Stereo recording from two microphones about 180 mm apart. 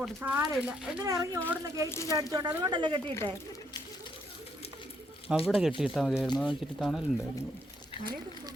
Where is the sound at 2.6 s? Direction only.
25° right (ahead or behind).